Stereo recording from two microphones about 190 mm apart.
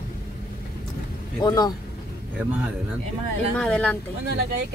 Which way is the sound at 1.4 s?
20° left (ahead or behind).